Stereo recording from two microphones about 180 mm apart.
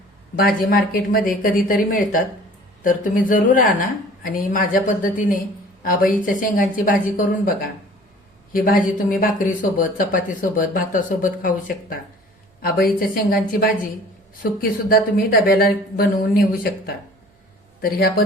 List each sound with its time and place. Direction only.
0.3 s speech: 55° left (ahead or behind)
8.5 s speech: 50° left (ahead or behind)
14.6 s speech: 55° left (ahead or behind)